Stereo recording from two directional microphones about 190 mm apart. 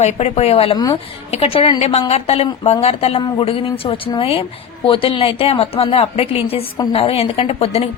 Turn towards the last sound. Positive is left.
turn(degrees=30)  # may be behind; listen again after turning